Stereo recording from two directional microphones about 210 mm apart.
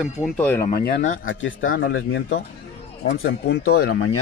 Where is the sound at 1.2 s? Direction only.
70° left (ahead or behind).